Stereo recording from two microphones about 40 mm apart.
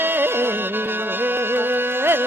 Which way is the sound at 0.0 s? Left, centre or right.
Right.